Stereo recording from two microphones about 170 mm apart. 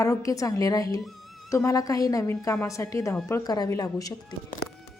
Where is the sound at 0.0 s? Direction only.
20° left (ahead or behind).